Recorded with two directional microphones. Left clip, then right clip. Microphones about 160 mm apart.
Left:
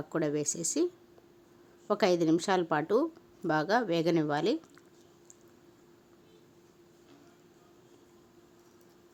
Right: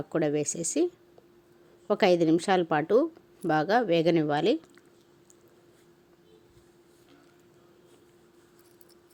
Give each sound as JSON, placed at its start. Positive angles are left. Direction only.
{"t": 0.1, "sound": "speech", "side_deg": -15}
{"t": 1.9, "sound": "speech", "side_deg": -15}